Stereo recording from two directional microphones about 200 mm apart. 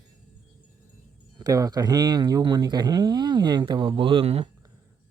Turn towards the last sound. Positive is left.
turn(degrees=-30)  # may be behind; listen again after turning